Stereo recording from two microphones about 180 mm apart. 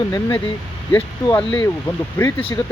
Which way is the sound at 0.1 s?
20° left (ahead or behind).